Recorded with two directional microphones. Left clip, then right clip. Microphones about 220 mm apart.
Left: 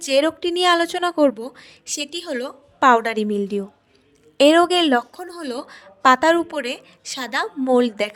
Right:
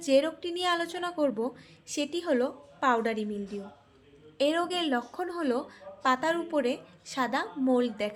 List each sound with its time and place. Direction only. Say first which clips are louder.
0.0 s a woman's voice: left 7 dB; 50° left (ahead or behind)
5.1 s speech: even; 5° left (ahead or behind)
5.5 s a woman's voice: left 2 dB; 50° left (ahead or behind)